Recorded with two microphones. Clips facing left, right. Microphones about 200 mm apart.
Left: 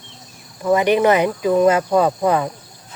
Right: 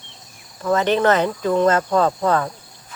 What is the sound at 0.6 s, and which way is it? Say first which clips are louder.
Speech: left 2 dB; 15° left (ahead or behind).